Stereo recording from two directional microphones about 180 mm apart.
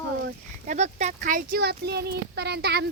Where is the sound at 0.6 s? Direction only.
40° right (ahead or behind).